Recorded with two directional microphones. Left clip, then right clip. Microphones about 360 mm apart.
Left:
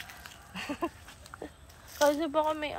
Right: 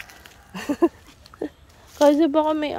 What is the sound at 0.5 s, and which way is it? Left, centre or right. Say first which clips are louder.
Speech: right 13 dB; centre.